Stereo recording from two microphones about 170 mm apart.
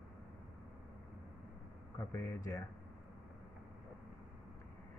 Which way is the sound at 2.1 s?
15° left (ahead or behind).